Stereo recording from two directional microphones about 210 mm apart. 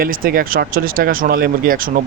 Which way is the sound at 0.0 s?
45° right (ahead or behind).